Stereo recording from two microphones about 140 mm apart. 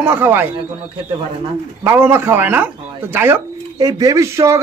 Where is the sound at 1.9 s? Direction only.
15° right (ahead or behind).